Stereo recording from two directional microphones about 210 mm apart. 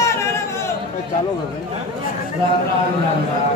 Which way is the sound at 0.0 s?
15° left (ahead or behind).